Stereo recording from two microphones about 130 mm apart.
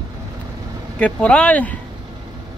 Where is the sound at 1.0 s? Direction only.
10° left (ahead or behind).